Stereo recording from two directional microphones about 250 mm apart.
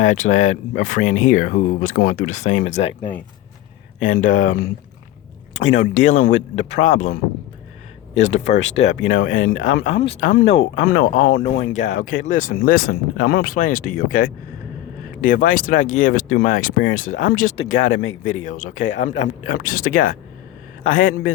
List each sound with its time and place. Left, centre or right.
0.0 s speech: left
5.7 s speech: left
9.8 s speech: left
10.2 s speech: left
18.7 s speech: left
18.9 s speech: left